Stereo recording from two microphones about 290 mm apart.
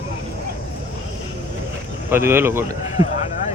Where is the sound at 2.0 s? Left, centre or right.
Centre.